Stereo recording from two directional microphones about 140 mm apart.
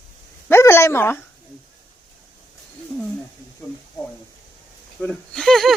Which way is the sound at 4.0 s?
30° left (ahead or behind).